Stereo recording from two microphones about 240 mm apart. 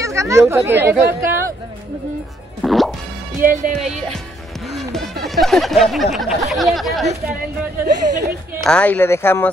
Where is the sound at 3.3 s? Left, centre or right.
Right.